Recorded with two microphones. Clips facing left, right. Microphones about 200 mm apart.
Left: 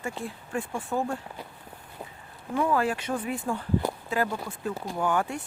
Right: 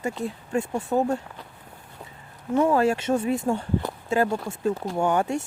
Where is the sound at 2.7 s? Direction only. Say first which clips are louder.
Right 4 dB; 25° right (ahead or behind).